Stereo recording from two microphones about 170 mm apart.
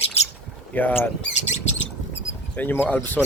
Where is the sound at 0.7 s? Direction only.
10° left (ahead or behind).